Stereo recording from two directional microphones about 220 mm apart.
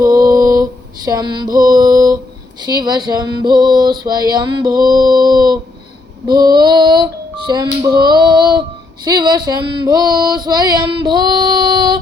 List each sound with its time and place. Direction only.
0.0 s mantra: 15° right (ahead or behind)
1.6 s female singing: 20° right (ahead or behind)
2.6 s music: 20° right (ahead or behind)
3.9 s female singing: 20° right (ahead or behind)
6.2 s music: 20° right (ahead or behind)
9.0 s female singing: 20° right (ahead or behind)